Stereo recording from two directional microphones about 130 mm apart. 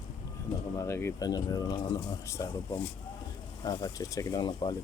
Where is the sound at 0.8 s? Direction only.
20° left (ahead or behind).